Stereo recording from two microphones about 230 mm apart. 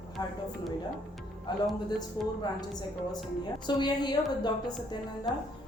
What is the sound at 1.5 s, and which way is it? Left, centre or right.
A woman's voice, centre.